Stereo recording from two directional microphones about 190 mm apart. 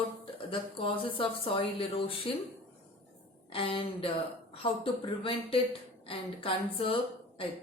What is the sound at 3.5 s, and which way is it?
A woman's voice, 30° left (ahead or behind).